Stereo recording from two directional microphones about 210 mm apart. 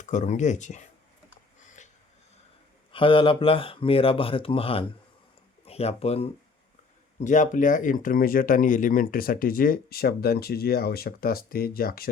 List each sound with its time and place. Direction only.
0.0 s speech: 35° left (ahead or behind)
2.9 s speech: 25° left (ahead or behind)
7.3 s speech: 35° left (ahead or behind)